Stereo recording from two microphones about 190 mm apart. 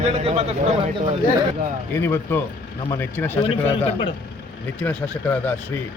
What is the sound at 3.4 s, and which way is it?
Speech, 25° left (ahead or behind).